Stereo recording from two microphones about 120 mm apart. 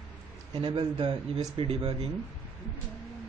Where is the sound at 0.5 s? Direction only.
35° right (ahead or behind).